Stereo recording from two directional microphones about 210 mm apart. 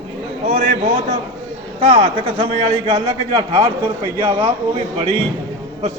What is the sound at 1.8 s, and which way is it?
A man's voice, 25° right (ahead or behind).